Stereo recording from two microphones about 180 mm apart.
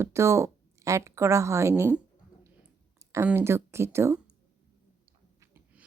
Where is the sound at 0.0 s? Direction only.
15° right (ahead or behind).